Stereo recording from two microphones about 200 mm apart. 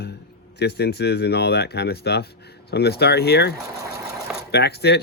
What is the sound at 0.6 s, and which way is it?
Speech, 55° left (ahead or behind).